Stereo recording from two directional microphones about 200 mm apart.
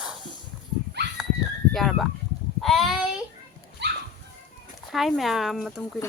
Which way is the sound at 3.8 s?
60° right (ahead or behind).